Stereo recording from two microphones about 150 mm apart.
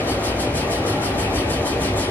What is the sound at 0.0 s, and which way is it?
Vehicle, 10° left (ahead or behind).